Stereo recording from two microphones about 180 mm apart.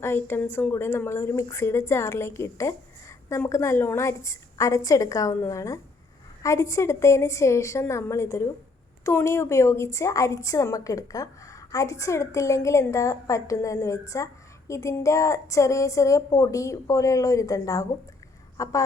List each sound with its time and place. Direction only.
0.0 s a woman's voice: 10° left (ahead or behind)